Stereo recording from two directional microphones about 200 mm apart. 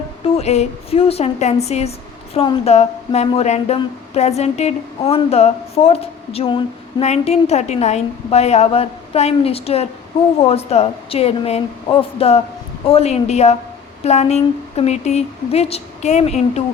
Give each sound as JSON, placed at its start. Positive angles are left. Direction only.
{"t": 0.3, "sound": "speech", "side_deg": 35}